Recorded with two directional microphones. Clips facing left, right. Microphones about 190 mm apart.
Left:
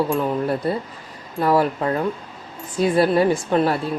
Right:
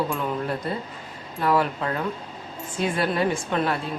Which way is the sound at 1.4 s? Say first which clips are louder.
Left 4 dB; 40° left (ahead or behind).